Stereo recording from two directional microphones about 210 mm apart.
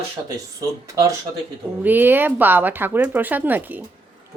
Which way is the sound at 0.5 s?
15° right (ahead or behind).